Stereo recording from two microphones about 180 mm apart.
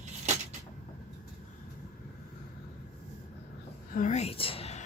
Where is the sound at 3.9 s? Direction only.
45° left (ahead or behind).